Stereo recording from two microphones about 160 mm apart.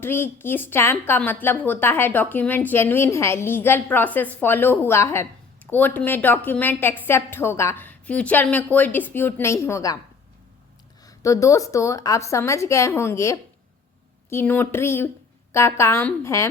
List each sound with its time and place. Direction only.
0.0 s a woman's voice: 15° left (ahead or behind)
11.0 s a woman's voice: 20° left (ahead or behind)